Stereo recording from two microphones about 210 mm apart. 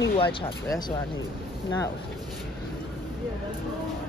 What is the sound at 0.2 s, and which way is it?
Speech, 25° left (ahead or behind).